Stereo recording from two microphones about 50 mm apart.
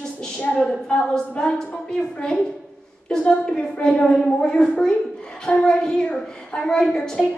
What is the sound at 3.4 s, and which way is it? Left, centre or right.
A woman's voice, centre.